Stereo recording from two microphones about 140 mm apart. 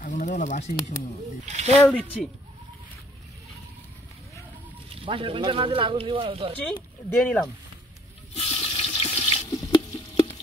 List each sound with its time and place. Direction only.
0.0 s speech: 70° left (ahead or behind)
1.4 s speech: 55° right (ahead or behind)
1.8 s speech: 10° left (ahead or behind)
4.8 s speech: 40° right (ahead or behind)
7.1 s speech: 10° left (ahead or behind)
8.4 s water: 45° left (ahead or behind)
9.7 s stir: 35° left (ahead or behind)